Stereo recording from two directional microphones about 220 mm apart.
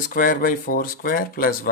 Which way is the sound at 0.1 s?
40° left (ahead or behind).